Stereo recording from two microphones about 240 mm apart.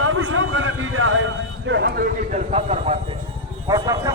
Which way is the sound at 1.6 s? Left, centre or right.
Right.